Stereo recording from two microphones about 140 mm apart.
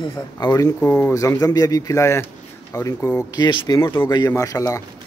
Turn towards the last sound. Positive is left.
turn(degrees=25)  # may be behind; listen again after turning